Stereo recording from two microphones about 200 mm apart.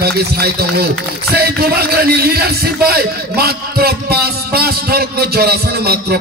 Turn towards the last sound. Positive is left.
turn(degrees=-50)  # may be behind; listen again after turning